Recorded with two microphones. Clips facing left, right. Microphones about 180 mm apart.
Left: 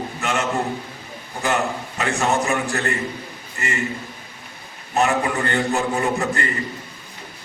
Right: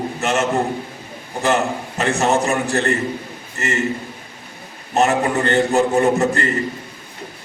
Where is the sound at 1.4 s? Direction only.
40° right (ahead or behind).